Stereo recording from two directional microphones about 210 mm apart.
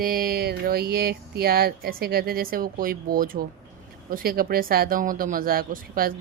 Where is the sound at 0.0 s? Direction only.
40° right (ahead or behind).